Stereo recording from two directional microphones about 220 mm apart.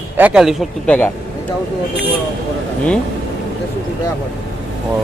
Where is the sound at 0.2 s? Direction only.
5° right (ahead or behind).